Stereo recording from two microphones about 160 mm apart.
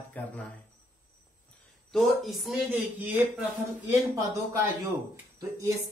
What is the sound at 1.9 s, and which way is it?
Speech, centre (ahead or behind).